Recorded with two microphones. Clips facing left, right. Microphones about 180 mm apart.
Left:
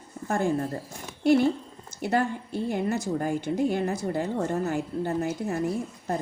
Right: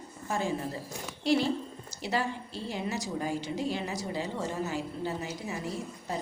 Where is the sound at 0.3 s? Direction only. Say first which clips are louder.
Left 6 dB; 55° left (ahead or behind).